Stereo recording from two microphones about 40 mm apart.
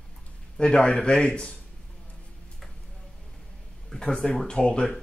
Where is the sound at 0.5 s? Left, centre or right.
Left.